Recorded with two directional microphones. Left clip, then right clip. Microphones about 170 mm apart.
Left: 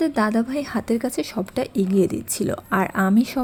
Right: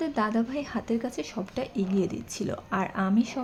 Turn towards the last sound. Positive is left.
turn(degrees=35)  # may be behind; listen again after turning